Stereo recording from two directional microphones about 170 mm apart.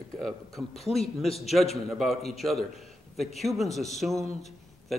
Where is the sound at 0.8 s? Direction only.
35° left (ahead or behind).